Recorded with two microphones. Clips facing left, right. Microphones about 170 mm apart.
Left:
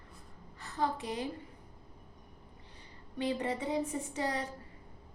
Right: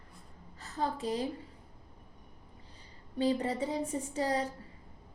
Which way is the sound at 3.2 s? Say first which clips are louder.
Right 3 dB; 35° right (ahead or behind).